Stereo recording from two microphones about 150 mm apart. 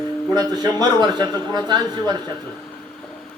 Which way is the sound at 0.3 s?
25° right (ahead or behind).